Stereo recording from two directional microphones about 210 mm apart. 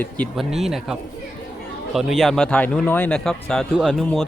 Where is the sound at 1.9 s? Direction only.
Centre (ahead or behind).